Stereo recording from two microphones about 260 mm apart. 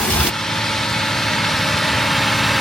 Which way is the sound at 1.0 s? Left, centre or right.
Centre.